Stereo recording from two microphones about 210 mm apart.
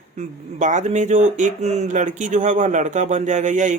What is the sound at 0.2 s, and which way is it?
Speech, 35° right (ahead or behind).